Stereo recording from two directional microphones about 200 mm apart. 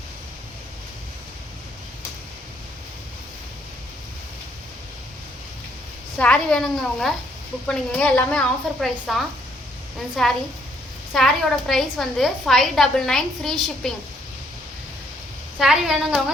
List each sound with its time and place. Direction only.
6.1 s a woman's voice: 5° left (ahead or behind)
15.5 s a woman's voice: centre (ahead or behind)